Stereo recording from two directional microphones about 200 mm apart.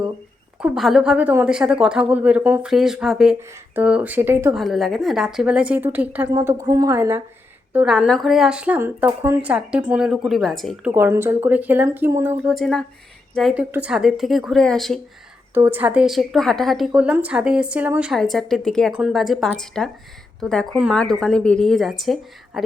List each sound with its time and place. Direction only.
0.6 s a woman's voice: centre (ahead or behind)
4.5 s a woman's voice: centre (ahead or behind)
10.9 s a woman's voice: 10° right (ahead or behind)
15.5 s a woman's voice: 10° right (ahead or behind)